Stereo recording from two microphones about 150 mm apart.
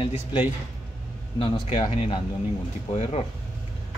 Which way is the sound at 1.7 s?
35° left (ahead or behind).